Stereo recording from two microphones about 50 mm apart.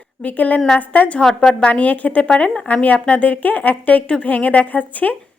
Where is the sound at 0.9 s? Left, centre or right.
Left.